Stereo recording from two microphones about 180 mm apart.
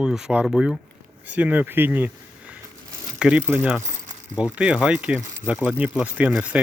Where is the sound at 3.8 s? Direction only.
40° right (ahead or behind).